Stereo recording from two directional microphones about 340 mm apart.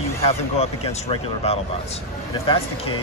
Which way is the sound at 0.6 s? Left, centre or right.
Centre.